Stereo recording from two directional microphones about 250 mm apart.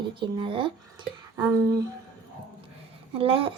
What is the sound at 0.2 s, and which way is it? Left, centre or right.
Speech, centre.